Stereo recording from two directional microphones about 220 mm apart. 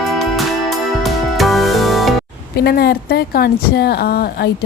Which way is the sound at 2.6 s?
45° left (ahead or behind).